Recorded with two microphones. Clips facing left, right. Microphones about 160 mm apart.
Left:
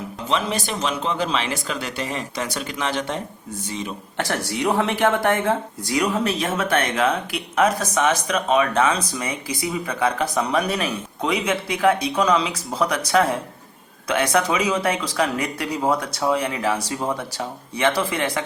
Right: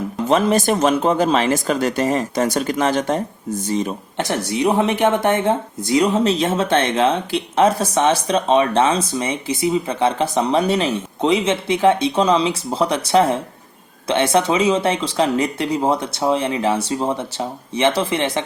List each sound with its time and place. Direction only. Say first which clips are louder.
0.3 s speech: right 8 dB; 45° right (ahead or behind)
4.2 s speech: right 4 dB; 20° right (ahead or behind)